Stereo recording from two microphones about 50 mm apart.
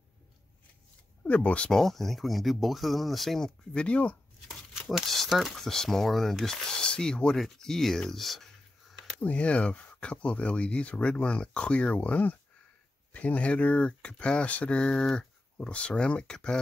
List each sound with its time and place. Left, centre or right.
1.2 s speech: left
1.7 s speech: centre
3.7 s speech: left
4.9 s speech: centre
9.2 s speech: left